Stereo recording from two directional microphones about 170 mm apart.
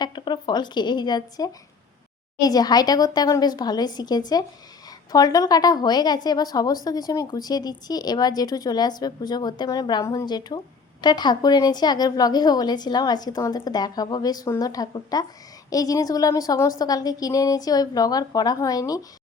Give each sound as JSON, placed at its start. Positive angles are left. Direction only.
{"t": 0.0, "sound": "a woman's voice", "side_deg": 25}